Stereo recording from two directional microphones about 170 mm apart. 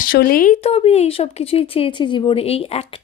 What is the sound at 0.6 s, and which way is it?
Speech, 35° left (ahead or behind).